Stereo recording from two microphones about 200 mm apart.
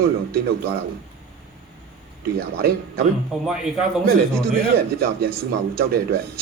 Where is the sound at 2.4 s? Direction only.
50° right (ahead or behind).